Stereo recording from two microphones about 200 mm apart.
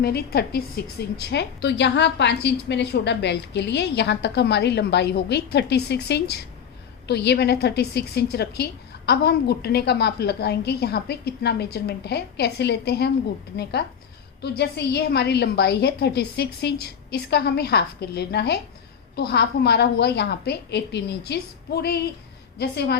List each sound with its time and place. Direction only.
0.0 s a woman's voice: 50° left (ahead or behind)